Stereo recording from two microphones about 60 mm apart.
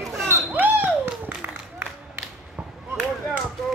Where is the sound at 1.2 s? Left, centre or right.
Right.